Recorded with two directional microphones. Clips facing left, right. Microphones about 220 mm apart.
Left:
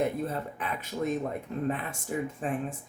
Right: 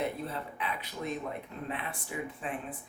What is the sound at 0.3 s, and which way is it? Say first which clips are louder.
Speech: left 3 dB; 45° left (ahead or behind).